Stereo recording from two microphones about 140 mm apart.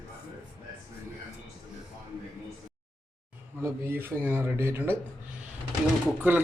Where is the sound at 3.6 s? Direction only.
15° right (ahead or behind).